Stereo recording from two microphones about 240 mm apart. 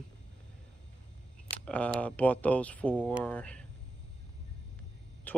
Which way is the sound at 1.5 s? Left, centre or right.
Centre.